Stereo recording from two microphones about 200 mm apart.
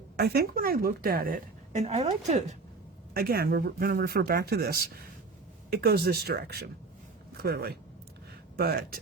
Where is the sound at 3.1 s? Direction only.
50° right (ahead or behind).